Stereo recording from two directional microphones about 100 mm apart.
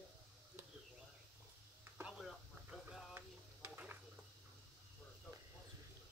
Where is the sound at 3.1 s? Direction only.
20° right (ahead or behind).